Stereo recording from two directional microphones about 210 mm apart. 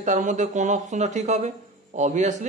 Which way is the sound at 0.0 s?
35° right (ahead or behind).